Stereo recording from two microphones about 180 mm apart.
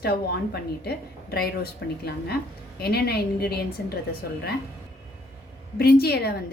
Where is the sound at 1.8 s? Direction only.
70° left (ahead or behind).